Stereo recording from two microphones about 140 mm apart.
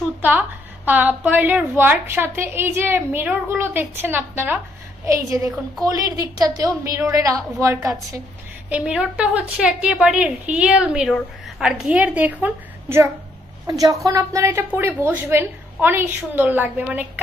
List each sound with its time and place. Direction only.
0.2 s a woman's voice: 10° right (ahead or behind)
8.6 s a woman's voice: 10° right (ahead or behind)
13.7 s a woman's voice: 25° right (ahead or behind)